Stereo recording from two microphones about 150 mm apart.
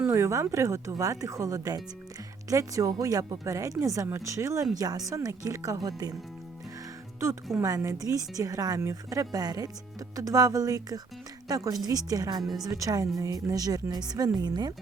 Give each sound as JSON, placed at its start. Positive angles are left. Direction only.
{"t": 0.1, "sound": "a woman's voice", "side_deg": -20}
{"t": 7.5, "sound": "a woman's voice", "side_deg": -20}